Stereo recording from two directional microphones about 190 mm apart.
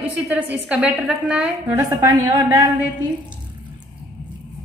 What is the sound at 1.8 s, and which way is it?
Speech, 15° right (ahead or behind).